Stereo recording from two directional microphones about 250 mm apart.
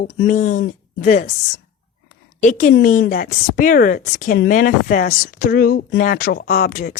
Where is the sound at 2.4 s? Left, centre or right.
Left.